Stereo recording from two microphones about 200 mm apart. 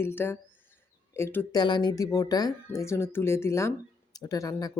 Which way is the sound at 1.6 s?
20° left (ahead or behind).